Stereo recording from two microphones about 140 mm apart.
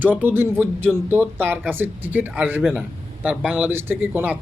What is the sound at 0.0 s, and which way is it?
A man's voice, 15° right (ahead or behind).